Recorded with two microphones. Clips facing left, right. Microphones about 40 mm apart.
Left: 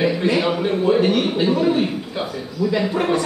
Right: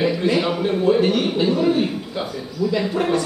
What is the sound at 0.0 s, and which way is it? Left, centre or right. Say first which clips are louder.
A man's voice: left 1 dB; centre.